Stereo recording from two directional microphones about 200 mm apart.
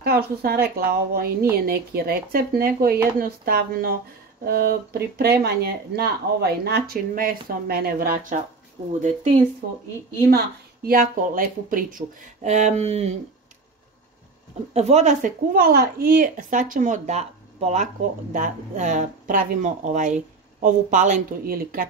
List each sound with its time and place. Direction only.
0.0 s speech: 50° right (ahead or behind); by 13.1 s 30° right (ahead or behind)
14.7 s speech: 35° right (ahead or behind)